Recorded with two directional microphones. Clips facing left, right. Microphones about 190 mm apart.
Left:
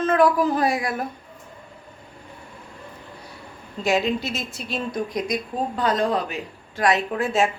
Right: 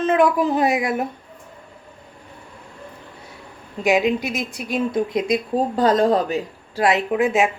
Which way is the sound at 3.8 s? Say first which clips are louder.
Right 4 dB; 15° right (ahead or behind).